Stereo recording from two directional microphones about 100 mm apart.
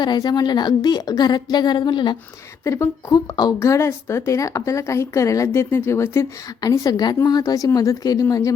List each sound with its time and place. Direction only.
0.0 s a woman's voice: 45° left (ahead or behind)
2.6 s speech: 25° left (ahead or behind)
3.1 s a woman's voice: 45° left (ahead or behind)
3.6 s speech: 30° left (ahead or behind)
6.6 s speech: 40° left (ahead or behind)